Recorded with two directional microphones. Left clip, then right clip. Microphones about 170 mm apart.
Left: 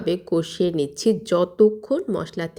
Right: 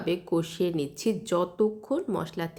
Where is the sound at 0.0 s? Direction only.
30° left (ahead or behind).